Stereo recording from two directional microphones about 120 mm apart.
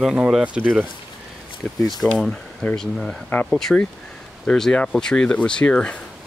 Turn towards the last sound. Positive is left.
turn(degrees=10)  # may be behind; listen again after turning